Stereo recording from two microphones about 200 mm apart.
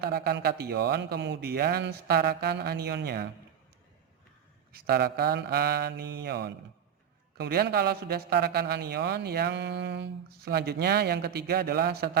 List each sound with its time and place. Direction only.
0.0 s a man's voice: 50° right (ahead or behind)
4.7 s a man's voice: 50° right (ahead or behind)